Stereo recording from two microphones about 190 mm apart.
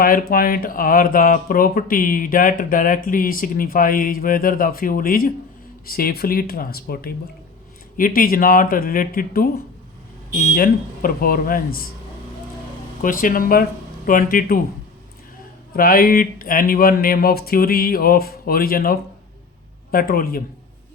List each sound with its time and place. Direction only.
0.0 s speech: 50° left (ahead or behind)
10.5 s speech: 50° left (ahead or behind)
13.0 s speech: 45° left (ahead or behind)
15.7 s speech: 50° left (ahead or behind)